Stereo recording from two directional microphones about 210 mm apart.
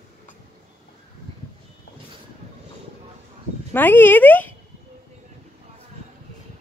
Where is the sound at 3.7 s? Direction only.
10° left (ahead or behind).